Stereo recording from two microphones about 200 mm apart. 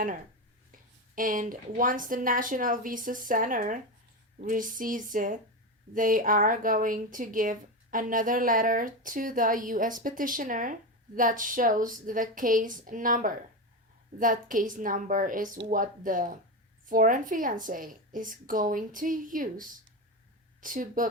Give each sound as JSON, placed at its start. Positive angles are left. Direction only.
{"t": 1.1, "sound": "a woman's voice", "side_deg": -40}